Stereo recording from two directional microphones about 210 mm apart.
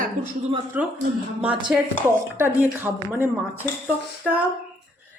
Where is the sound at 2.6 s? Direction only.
10° right (ahead or behind).